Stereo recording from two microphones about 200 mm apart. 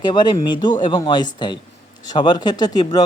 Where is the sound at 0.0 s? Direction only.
20° left (ahead or behind).